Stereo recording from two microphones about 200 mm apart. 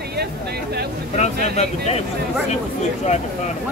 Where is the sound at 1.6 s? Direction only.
30° left (ahead or behind).